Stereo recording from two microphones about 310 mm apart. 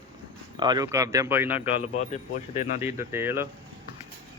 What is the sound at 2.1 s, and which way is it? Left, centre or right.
Speech, left.